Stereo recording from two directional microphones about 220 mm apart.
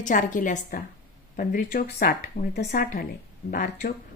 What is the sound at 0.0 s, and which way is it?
Speech, 35° left (ahead or behind).